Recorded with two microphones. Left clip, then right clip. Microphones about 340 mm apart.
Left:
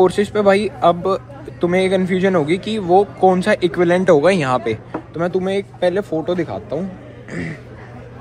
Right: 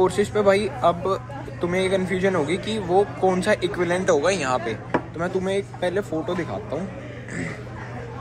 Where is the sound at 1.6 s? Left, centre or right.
Left.